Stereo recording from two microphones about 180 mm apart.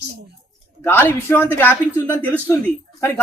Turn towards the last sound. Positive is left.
turn(degrees=10)  # may be behind; listen again after turning